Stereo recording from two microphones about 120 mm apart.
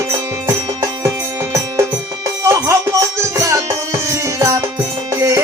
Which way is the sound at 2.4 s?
25° right (ahead or behind).